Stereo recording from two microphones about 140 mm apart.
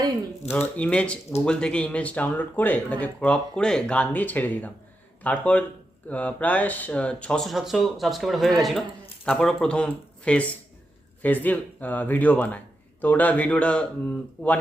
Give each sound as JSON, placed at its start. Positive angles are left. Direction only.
{"t": 0.4, "sound": "speech", "side_deg": 50}
{"t": 0.8, "sound": "speech", "side_deg": 10}